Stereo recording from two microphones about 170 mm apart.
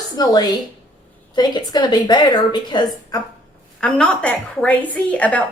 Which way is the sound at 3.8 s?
5° left (ahead or behind).